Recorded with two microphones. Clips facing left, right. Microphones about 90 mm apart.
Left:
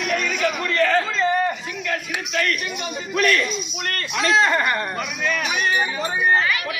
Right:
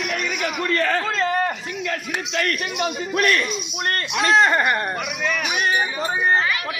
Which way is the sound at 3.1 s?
40° right (ahead or behind).